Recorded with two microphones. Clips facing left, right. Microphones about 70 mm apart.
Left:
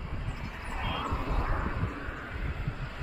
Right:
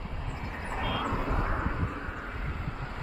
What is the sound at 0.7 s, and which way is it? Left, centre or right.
Vehicle, centre.